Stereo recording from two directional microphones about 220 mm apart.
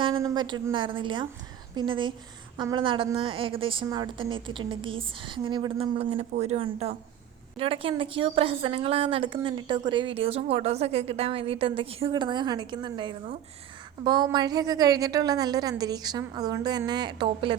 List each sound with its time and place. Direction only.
0.2 s a woman's voice: 15° right (ahead or behind)